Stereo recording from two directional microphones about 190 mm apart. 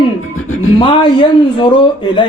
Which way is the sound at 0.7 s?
25° left (ahead or behind).